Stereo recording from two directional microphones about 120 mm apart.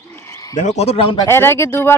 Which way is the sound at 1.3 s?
20° left (ahead or behind).